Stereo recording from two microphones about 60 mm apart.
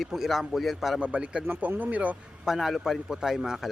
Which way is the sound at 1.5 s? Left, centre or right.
Right.